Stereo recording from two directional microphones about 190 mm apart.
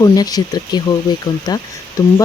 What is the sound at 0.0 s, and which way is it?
Speech, 20° left (ahead or behind).